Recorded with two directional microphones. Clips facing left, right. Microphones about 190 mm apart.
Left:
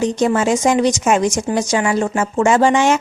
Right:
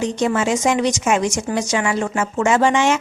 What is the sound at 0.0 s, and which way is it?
Speech, 40° left (ahead or behind).